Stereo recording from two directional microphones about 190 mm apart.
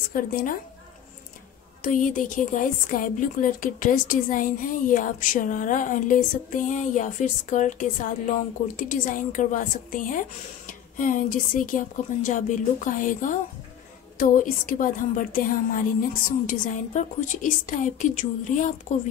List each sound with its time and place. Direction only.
0.1 s a woman's voice: 50° left (ahead or behind)
1.8 s a woman's voice: 45° left (ahead or behind)